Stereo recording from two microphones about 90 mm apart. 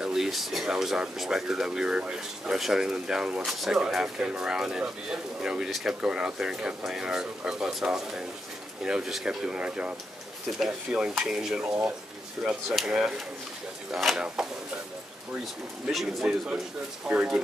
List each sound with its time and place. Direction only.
0.0 s a man's voice: 5° right (ahead or behind)
12.6 s a man's voice: centre (ahead or behind)
15.9 s a man's voice: centre (ahead or behind)
17.1 s speech: 15° right (ahead or behind)